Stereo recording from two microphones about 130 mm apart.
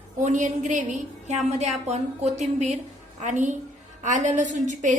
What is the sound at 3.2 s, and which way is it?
A woman's voice, 70° right (ahead or behind).